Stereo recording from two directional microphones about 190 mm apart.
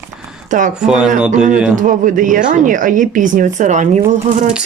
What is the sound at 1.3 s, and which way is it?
Speech, 40° right (ahead or behind).